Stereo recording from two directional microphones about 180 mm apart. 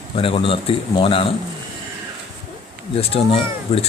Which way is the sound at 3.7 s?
35° left (ahead or behind).